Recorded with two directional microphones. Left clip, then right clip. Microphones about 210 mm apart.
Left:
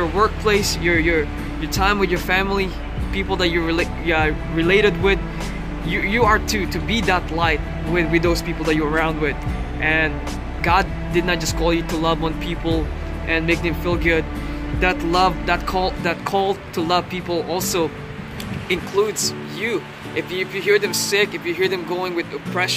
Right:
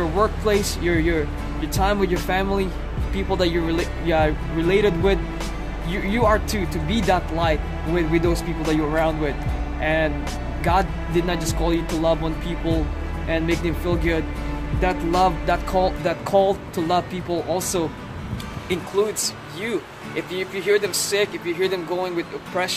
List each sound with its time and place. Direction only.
0.2 s speech: 10° right (ahead or behind)
19.0 s speech: centre (ahead or behind)